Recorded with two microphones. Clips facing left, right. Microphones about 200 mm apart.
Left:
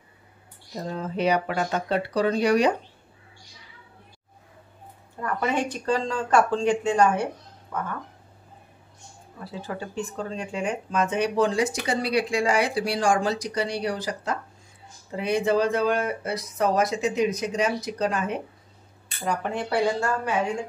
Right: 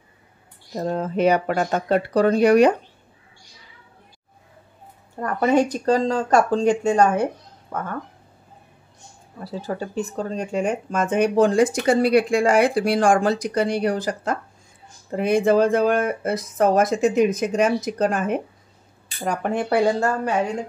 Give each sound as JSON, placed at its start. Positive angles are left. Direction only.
{"t": 0.7, "sound": "speech", "side_deg": -50}
{"t": 5.2, "sound": "speech", "side_deg": -40}
{"t": 9.4, "sound": "speech", "side_deg": -40}